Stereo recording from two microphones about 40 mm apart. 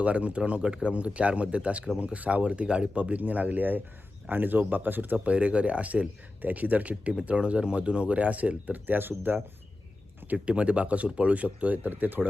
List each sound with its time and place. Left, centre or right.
0.0 s speech: right
5.1 s speech: right
10.3 s speech: right